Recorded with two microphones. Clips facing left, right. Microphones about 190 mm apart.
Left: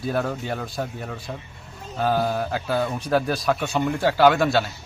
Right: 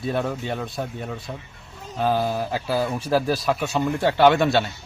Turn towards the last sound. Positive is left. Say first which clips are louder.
# right 1 dB
turn(degrees=0)  # may be behind; listen again after turning